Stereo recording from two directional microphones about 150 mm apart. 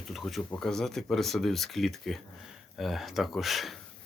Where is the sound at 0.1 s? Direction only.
Centre (ahead or behind).